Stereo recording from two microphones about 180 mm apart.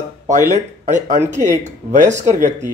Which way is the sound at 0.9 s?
45° right (ahead or behind).